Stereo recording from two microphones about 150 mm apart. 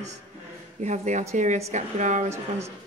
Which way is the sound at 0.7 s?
50° right (ahead or behind).